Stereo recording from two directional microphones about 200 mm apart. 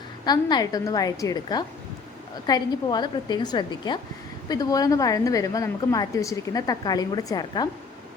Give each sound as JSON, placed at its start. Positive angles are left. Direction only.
{"t": 0.3, "sound": "a woman's voice", "side_deg": 20}